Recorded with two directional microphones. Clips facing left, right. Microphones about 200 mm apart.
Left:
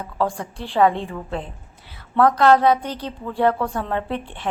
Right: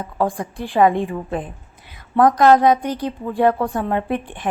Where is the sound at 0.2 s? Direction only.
15° right (ahead or behind).